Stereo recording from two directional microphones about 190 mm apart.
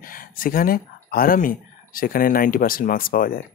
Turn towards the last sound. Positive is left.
turn(degrees=50)  # may be behind; listen again after turning